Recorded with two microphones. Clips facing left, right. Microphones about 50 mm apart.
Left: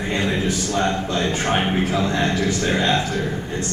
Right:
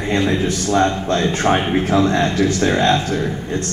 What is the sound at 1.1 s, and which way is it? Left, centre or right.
A man's voice, right.